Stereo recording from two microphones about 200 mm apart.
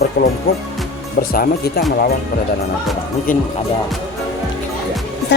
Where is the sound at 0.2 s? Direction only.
45° left (ahead or behind).